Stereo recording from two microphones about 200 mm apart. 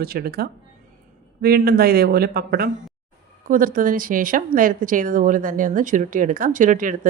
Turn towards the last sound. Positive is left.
turn(degrees=-40)  # may be behind; listen again after turning